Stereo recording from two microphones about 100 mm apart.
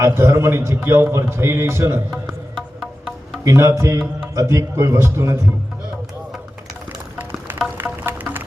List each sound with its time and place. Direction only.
0.0 s speech: 25° right (ahead or behind)
3.4 s speech: 30° right (ahead or behind)
7.2 s music: 20° right (ahead or behind)